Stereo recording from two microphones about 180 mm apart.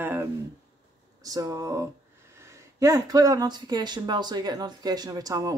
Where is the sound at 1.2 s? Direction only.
20° right (ahead or behind).